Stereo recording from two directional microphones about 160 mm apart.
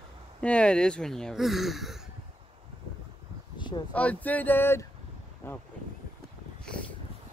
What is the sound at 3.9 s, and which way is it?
Speech, 10° left (ahead or behind).